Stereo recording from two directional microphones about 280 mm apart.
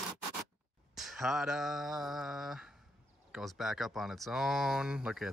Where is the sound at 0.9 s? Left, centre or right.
Centre.